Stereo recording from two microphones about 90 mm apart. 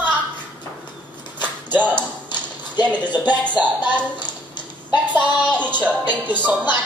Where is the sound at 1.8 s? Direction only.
20° right (ahead or behind).